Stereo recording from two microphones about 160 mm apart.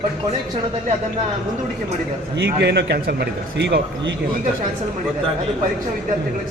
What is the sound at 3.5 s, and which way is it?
Speech, 90° right.